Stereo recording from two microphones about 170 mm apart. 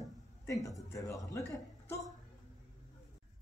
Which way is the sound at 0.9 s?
20° left (ahead or behind).